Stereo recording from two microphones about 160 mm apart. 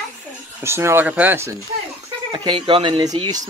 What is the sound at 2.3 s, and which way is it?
Speech, 30° right (ahead or behind).